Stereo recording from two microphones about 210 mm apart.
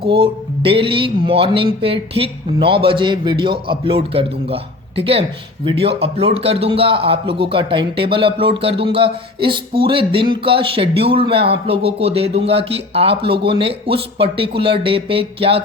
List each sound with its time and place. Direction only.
0.1 s a man's voice: 25° right (ahead or behind)